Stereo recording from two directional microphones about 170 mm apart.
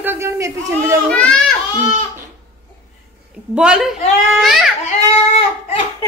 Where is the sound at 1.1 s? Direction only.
5° left (ahead or behind).